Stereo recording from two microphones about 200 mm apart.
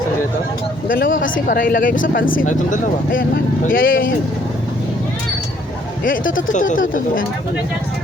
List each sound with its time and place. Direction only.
0.9 s speech: 45° left (ahead or behind)
6.5 s speech: 40° left (ahead or behind)